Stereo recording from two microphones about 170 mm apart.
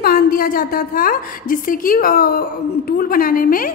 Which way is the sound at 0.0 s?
60° left (ahead or behind).